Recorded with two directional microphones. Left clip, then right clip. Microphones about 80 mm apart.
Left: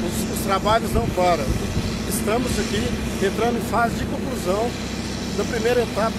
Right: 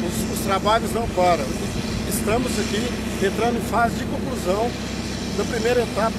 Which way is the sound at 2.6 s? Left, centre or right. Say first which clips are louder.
Even; centre.